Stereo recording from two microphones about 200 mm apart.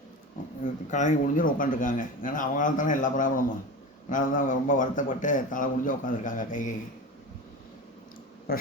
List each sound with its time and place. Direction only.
0.6 s speech: 40° left (ahead or behind)
8.5 s speech: 50° left (ahead or behind)